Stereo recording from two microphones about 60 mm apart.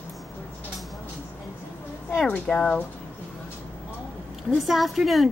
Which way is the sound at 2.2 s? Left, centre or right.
Left.